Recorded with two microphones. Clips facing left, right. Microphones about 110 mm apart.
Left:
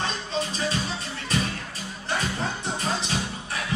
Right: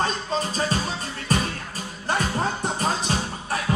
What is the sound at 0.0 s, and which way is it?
Music, 40° right (ahead or behind).